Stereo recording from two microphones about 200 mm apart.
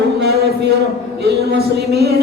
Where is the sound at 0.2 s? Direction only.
55° right (ahead or behind).